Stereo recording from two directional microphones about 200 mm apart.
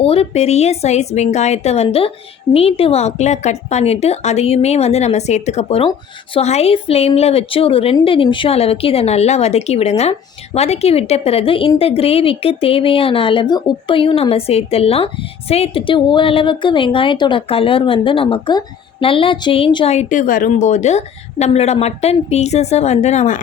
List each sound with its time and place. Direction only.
0.0 s a woman's voice: 30° left (ahead or behind)